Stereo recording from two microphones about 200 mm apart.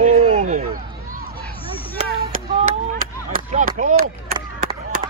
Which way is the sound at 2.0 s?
45° right (ahead or behind).